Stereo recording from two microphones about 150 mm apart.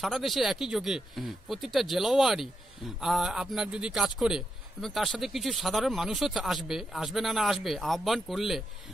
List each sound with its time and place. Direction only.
0.0 s a man's voice: centre (ahead or behind)